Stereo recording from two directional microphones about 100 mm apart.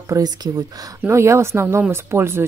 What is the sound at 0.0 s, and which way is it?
Speech, 35° right (ahead or behind).